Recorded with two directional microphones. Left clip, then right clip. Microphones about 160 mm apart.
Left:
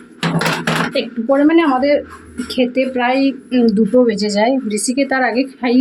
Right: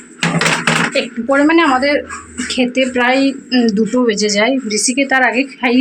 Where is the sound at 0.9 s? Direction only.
15° left (ahead or behind).